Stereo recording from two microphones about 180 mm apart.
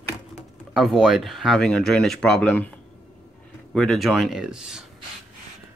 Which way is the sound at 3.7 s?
Centre (ahead or behind).